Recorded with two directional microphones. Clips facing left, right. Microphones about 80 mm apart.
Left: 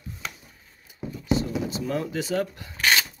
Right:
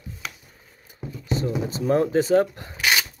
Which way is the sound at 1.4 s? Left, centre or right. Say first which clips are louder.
Right 2 dB; right.